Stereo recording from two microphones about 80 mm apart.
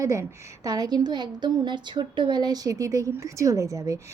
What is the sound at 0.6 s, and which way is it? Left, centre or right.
A woman's voice, right.